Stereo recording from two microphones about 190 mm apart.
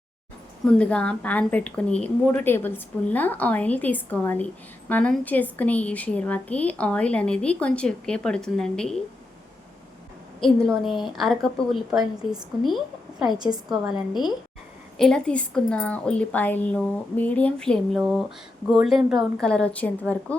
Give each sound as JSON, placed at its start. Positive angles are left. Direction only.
{"t": 0.6, "sound": "a woman's voice", "side_deg": 5}
{"t": 10.4, "sound": "a woman's voice", "side_deg": 5}
{"t": 13.4, "sound": "a woman's voice", "side_deg": -20}
{"t": 14.1, "sound": "a woman's voice", "side_deg": 20}
{"t": 14.9, "sound": "a woman's voice", "side_deg": 0}